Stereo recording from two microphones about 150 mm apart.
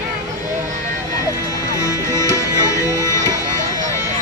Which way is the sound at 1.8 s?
20° left (ahead or behind).